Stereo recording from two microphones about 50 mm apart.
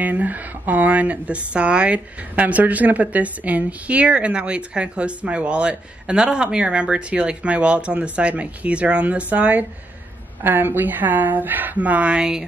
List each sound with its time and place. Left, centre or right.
0.0 s speech: right
10.4 s speech: right
12.2 s speech: centre